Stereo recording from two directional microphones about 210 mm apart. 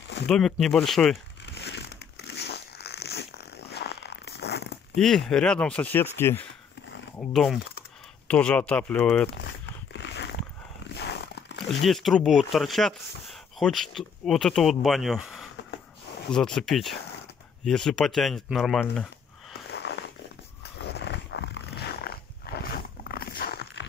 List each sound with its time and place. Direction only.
0.3 s speech: 5° left (ahead or behind)
1.4 s crumpling: 55° left (ahead or behind)
4.9 s speech: centre (ahead or behind)
9.9 s a sound: 55° left (ahead or behind)
11.7 s speech: centre (ahead or behind)
19.7 s a sound: 55° left (ahead or behind)
20.8 s dog: 55° left (ahead or behind)